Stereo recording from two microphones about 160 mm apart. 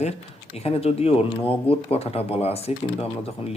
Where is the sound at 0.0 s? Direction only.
40° left (ahead or behind).